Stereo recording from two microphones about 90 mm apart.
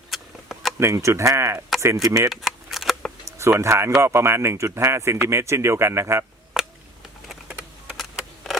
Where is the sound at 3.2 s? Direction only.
30° right (ahead or behind).